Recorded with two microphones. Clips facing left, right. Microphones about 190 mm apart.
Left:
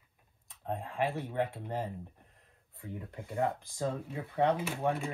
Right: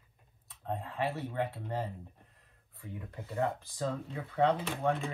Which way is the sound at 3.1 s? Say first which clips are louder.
Left 1 dB; 15° left (ahead or behind).